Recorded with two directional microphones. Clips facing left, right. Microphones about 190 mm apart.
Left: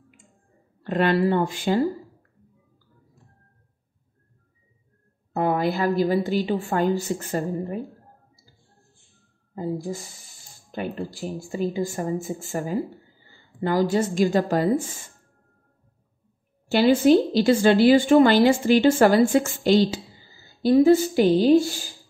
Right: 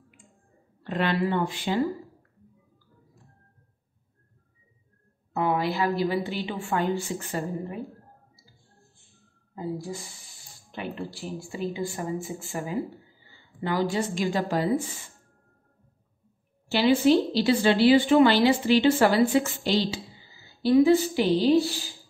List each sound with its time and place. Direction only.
0.8 s a woman's voice: 45° left (ahead or behind)
5.3 s a woman's voice: 45° left (ahead or behind)
10.7 s a woman's voice: 40° left (ahead or behind)
16.7 s a woman's voice: 45° left (ahead or behind)